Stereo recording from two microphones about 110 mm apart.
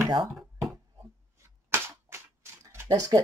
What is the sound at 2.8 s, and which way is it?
Speech, 35° right (ahead or behind).